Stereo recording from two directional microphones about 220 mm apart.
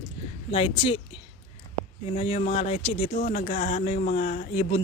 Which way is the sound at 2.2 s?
25° left (ahead or behind).